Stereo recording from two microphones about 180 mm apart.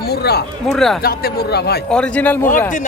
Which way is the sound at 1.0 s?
60° left (ahead or behind).